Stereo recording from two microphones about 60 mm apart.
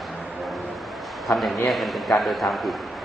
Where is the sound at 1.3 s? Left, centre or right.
Centre.